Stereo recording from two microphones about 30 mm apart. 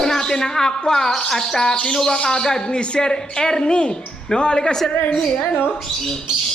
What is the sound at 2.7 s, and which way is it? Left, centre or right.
A woman's voice, left.